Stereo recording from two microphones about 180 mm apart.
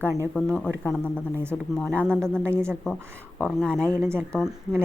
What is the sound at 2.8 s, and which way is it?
Speech, 5° left (ahead or behind).